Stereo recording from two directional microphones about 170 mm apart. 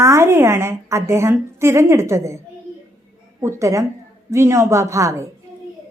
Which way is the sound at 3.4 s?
15° right (ahead or behind).